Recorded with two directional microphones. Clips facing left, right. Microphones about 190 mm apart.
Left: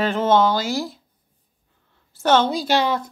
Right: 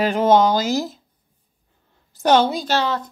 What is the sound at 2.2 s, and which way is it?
Speech, 15° right (ahead or behind).